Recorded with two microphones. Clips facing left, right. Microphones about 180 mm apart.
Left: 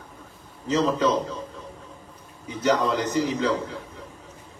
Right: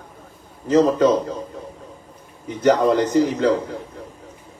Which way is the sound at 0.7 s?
50° right (ahead or behind).